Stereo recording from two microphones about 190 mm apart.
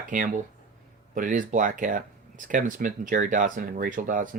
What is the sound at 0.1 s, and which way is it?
Speech, 45° right (ahead or behind).